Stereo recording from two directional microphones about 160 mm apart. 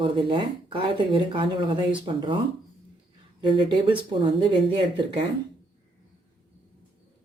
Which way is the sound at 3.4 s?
30° right (ahead or behind).